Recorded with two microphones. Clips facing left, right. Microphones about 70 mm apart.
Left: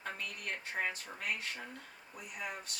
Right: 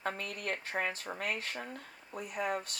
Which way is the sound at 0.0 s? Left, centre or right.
Right.